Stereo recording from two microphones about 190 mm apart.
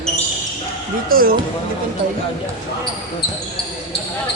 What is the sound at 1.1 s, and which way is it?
Speech, 50° right (ahead or behind).